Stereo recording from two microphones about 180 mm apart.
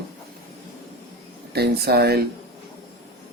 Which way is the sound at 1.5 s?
60° right (ahead or behind).